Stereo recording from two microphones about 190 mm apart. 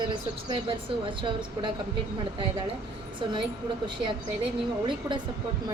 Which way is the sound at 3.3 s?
25° right (ahead or behind).